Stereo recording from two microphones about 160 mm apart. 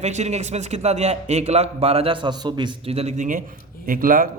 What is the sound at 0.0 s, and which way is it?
A man's voice, 45° right (ahead or behind).